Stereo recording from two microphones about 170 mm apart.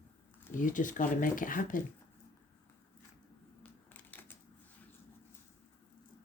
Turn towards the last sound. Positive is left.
turn(degrees=10)  # may be behind; listen again after turning